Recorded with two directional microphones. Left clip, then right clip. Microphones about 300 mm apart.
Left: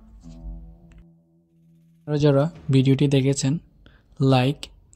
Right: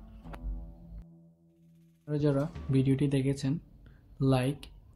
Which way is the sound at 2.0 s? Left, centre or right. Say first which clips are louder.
Left 10 dB; left.